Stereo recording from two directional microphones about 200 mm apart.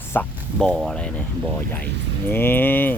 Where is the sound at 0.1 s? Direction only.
5° left (ahead or behind).